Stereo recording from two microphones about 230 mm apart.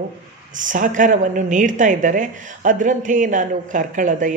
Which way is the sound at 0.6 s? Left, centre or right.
Right.